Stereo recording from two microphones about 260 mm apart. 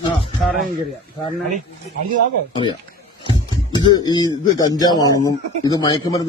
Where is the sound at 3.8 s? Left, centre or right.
Centre.